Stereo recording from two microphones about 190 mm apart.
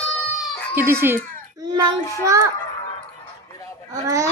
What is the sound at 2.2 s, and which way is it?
Speech, 15° right (ahead or behind).